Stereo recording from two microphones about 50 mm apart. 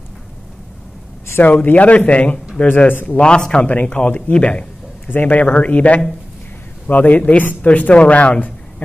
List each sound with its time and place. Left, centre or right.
1.4 s speech: left
2.9 s speech: left
3.2 s speech: centre
5.0 s speech: left